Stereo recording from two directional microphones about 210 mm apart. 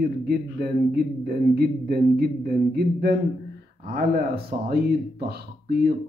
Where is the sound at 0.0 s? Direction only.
45° right (ahead or behind).